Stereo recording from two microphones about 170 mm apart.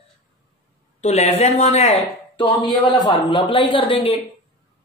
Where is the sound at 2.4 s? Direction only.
25° left (ahead or behind).